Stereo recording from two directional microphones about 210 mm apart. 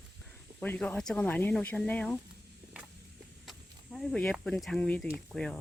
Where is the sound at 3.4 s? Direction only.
Centre (ahead or behind).